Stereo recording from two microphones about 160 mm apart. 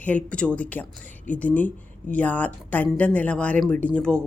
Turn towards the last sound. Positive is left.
turn(degrees=5)  # may be behind; listen again after turning